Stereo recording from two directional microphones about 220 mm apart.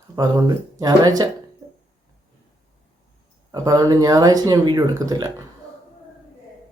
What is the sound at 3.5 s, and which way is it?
Speech, 15° right (ahead or behind).